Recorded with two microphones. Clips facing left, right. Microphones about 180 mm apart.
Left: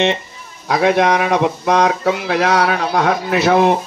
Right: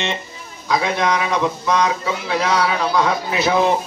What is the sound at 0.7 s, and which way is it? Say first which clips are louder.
Speech: left 5 dB; 65° left (ahead or behind).